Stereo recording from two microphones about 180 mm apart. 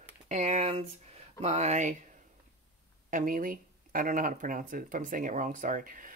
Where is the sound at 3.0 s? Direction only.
50° right (ahead or behind).